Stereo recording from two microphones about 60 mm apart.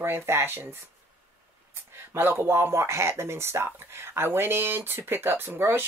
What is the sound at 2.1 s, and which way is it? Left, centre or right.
Speech, right.